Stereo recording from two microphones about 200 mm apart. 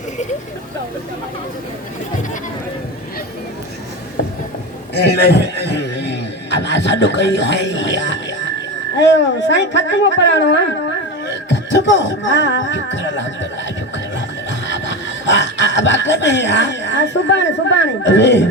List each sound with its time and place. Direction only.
4.9 s speech: 55° left (ahead or behind)
11.3 s music: 60° left (ahead or behind)
14.7 s speech: 65° left (ahead or behind)